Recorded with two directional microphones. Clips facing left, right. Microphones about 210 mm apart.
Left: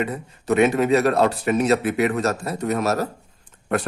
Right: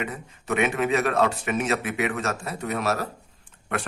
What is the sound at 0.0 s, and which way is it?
A man's voice, 35° left (ahead or behind).